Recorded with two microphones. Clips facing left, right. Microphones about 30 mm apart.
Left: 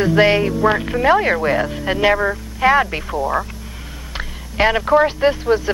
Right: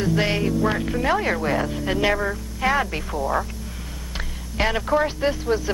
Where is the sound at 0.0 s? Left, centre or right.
Left.